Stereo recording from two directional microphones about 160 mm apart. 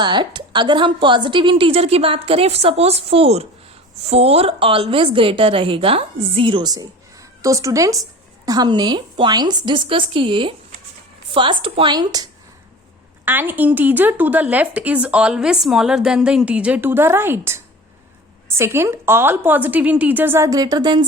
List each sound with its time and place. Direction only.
0.0 s a woman's voice: 30° right (ahead or behind)
13.2 s speech: 10° right (ahead or behind)